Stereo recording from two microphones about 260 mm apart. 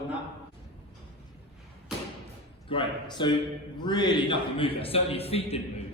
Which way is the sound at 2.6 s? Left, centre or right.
Centre.